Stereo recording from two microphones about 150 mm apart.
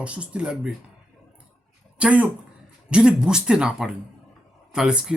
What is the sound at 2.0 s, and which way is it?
Speech, 10° right (ahead or behind).